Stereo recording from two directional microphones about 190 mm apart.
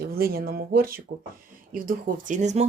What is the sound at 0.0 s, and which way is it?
Speech, 50° right (ahead or behind).